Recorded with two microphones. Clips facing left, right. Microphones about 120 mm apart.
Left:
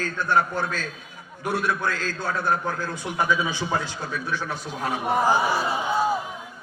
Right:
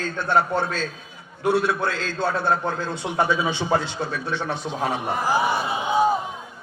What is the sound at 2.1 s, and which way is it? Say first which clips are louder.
Speech: right 4 dB; 70° right (ahead or behind).